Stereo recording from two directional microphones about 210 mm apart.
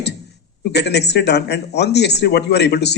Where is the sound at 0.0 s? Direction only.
50° left (ahead or behind).